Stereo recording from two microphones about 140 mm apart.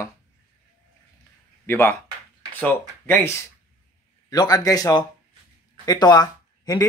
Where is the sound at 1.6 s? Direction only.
15° left (ahead or behind).